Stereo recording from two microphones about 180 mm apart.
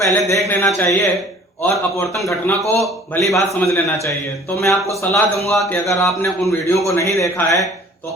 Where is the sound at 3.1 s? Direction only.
15° left (ahead or behind).